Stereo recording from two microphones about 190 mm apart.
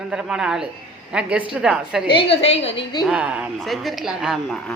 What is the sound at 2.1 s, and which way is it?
Speech, 30° left (ahead or behind).